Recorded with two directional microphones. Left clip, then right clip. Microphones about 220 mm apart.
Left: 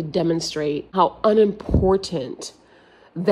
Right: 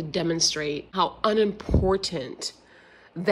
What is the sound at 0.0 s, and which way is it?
A woman's voice, 10° left (ahead or behind).